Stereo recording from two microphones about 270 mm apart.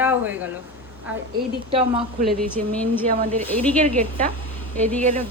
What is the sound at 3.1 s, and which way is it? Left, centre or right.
Speech, right.